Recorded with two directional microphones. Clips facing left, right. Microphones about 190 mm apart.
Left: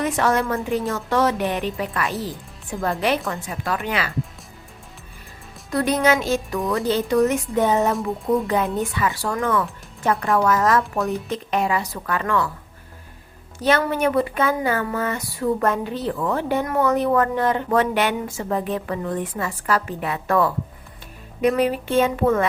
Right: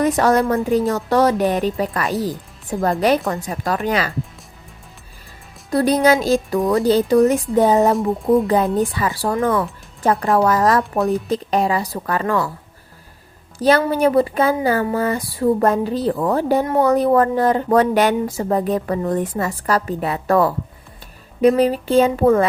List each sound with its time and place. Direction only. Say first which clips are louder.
0.0 s speech: right 5 dB; 40° right (ahead or behind)
5.7 s speech: right 4 dB; 35° right (ahead or behind)
13.6 s speech: right 4 dB; 35° right (ahead or behind)